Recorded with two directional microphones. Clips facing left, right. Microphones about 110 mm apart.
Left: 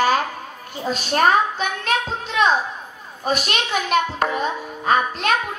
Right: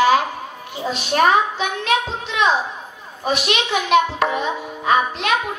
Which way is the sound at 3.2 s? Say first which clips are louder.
Right 2 dB; 40° left (ahead or behind).